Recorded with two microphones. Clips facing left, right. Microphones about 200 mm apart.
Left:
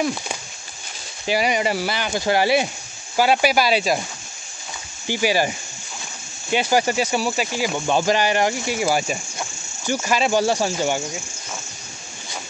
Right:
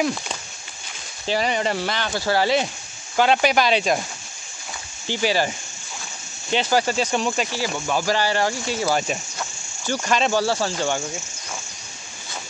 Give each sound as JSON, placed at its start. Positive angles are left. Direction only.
{"t": 0.0, "sound": "speech", "side_deg": 5}
{"t": 5.0, "sound": "speech", "side_deg": 10}
{"t": 6.5, "sound": "speech", "side_deg": 10}